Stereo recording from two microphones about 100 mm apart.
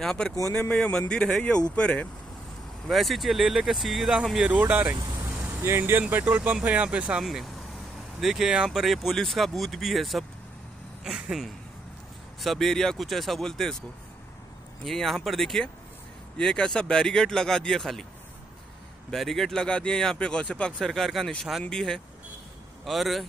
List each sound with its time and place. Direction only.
0.0 s speech: 5° left (ahead or behind)
2.9 s speech: centre (ahead or behind)
4.6 s speech: 20° right (ahead or behind)
4.8 s speech: 40° right (ahead or behind)
5.2 s speech: 25° right (ahead or behind); by 13.7 s 5° left (ahead or behind)
14.9 s speech: 5° left (ahead or behind)
19.0 s speech: 5° left (ahead or behind)